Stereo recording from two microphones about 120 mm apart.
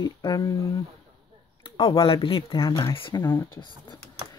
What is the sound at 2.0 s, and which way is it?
Speech, 50° left (ahead or behind).